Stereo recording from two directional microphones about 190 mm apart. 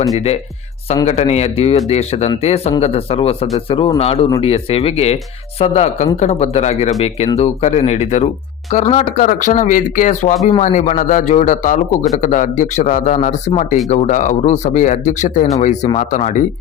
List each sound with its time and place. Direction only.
1.0 s a man's voice: 35° left (ahead or behind)